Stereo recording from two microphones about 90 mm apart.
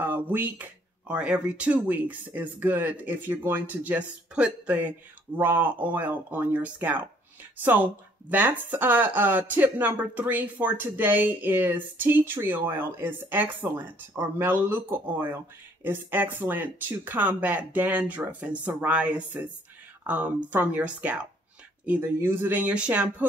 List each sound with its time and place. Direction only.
0.0 s speech: 20° right (ahead or behind)